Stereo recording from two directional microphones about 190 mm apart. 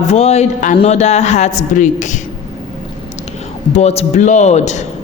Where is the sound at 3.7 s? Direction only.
35° left (ahead or behind).